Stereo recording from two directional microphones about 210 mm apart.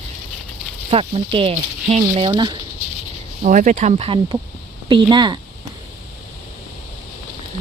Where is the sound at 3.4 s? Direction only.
35° right (ahead or behind); by 5.3 s 20° right (ahead or behind).